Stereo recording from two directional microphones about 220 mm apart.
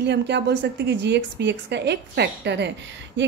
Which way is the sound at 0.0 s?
50° right (ahead or behind).